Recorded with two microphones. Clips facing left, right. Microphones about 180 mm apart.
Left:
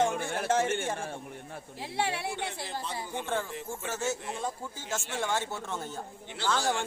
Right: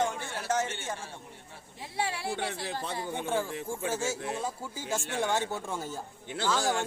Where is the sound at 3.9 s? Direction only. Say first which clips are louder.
Even; 10° right (ahead or behind).